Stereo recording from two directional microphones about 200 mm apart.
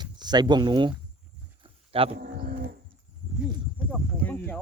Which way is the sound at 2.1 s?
45° right (ahead or behind).